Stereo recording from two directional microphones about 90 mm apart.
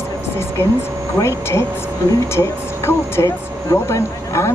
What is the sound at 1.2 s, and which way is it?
Speech, 30° left (ahead or behind).